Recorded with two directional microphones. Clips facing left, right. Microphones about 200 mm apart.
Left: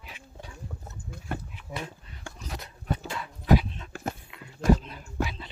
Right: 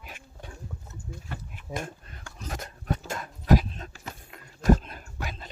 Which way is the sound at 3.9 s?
55° left (ahead or behind).